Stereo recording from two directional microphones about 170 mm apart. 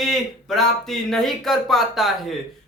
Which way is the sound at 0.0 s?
Centre (ahead or behind).